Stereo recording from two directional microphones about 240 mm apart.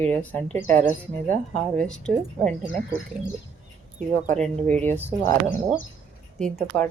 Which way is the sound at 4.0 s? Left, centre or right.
Right.